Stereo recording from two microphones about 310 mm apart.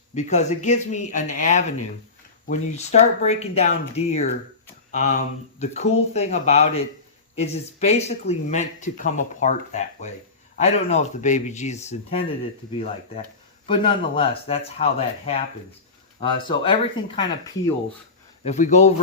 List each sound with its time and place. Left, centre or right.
0.1 s speech: left
13.7 s speech: centre